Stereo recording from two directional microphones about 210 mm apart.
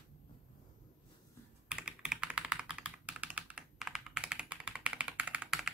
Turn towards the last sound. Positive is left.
turn(degrees=-5)  # may be behind; listen again after turning